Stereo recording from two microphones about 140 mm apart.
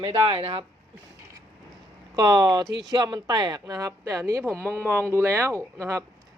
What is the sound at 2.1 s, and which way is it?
Speech, 30° right (ahead or behind).